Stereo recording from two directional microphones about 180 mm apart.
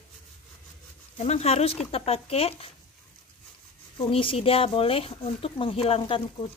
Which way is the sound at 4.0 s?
30° left (ahead or behind).